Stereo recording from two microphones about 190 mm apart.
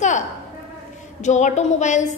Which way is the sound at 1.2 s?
40° left (ahead or behind).